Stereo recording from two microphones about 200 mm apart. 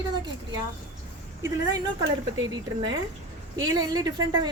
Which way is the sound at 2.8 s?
20° right (ahead or behind).